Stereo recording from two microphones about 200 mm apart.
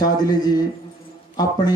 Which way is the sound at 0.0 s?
20° left (ahead or behind).